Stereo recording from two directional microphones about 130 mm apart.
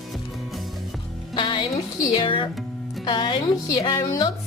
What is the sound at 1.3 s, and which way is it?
Speech, 35° left (ahead or behind).